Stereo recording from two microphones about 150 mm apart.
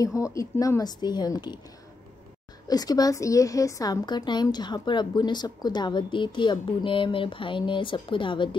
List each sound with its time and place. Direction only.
0.0 s a woman's voice: 20° left (ahead or behind)
2.7 s a woman's voice: 25° left (ahead or behind)